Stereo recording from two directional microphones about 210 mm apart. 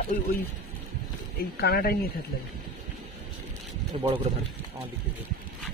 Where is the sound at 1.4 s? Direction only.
45° left (ahead or behind).